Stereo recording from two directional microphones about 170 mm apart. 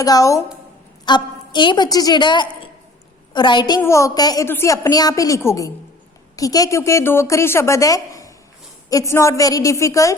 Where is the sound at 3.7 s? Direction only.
15° left (ahead or behind).